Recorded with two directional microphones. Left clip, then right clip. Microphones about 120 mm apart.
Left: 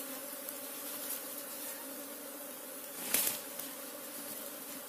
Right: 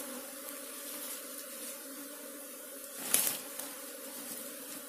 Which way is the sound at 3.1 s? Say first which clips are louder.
Right 2 dB; 45° right (ahead or behind).